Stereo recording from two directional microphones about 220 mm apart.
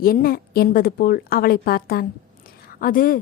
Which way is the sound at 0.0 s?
40° left (ahead or behind).